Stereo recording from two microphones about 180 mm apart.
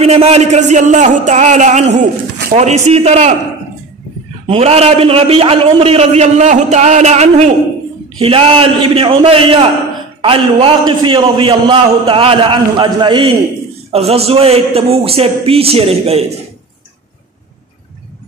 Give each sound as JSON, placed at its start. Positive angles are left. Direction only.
{"t": 0.0, "sound": "a man's voice", "side_deg": -35}
{"t": 2.0, "sound": "a sound", "side_deg": -65}
{"t": 2.5, "sound": "a man's voice", "side_deg": -40}
{"t": 4.5, "sound": "a man's voice", "side_deg": -35}